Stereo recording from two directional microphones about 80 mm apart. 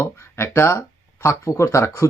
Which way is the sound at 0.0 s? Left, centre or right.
Left.